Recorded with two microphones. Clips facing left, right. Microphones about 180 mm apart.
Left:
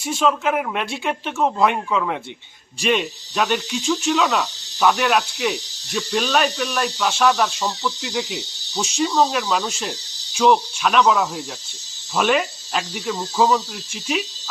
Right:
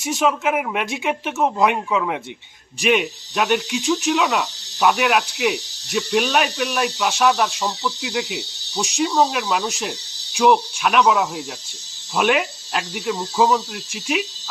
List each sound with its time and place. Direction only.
0.2 s speech: 10° right (ahead or behind)
3.8 s speech: 15° right (ahead or behind)